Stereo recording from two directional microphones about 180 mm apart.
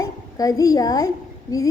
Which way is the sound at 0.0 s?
20° left (ahead or behind).